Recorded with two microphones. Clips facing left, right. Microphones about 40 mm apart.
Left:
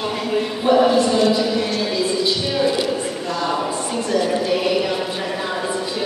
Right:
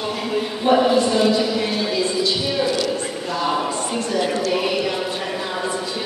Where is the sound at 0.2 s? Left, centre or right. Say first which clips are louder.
Left 2 dB; centre.